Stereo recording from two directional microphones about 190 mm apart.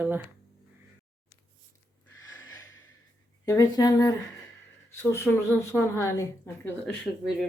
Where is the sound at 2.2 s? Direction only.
20° left (ahead or behind).